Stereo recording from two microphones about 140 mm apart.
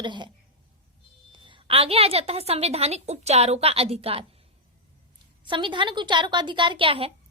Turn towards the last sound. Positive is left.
turn(degrees=-40)  # may be behind; listen again after turning